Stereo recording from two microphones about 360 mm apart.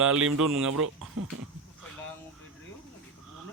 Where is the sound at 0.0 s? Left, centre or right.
Right.